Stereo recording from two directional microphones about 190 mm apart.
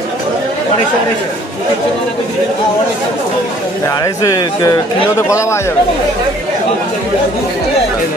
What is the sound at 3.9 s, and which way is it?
A man's voice, 20° left (ahead or behind).